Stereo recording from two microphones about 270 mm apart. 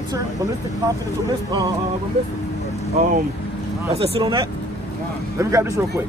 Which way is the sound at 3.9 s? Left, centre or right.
Right.